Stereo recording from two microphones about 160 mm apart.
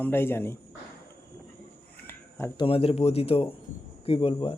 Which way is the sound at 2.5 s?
35° left (ahead or behind).